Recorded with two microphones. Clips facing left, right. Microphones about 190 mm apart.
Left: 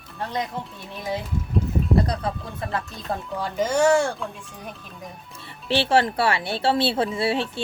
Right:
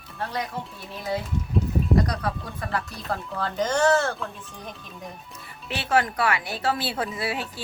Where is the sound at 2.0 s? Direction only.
25° left (ahead or behind).